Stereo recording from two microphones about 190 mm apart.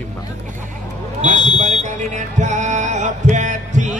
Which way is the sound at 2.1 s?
40° right (ahead or behind).